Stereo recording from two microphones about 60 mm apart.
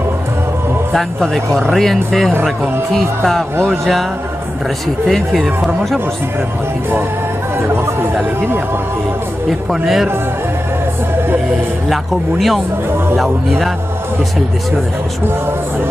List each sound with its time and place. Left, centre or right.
0.9 s a man's voice: centre
3.6 s speech: centre
5.0 s speech: centre
8.0 s speech: right
9.5 s speech: centre
11.9 s speech: centre